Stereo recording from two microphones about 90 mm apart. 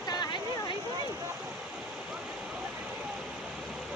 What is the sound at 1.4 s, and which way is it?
Waterfall, 10° right (ahead or behind).